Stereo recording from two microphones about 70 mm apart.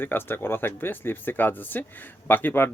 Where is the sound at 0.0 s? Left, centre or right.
Left.